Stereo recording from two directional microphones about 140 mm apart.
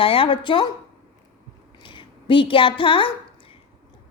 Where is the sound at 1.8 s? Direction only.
35° left (ahead or behind).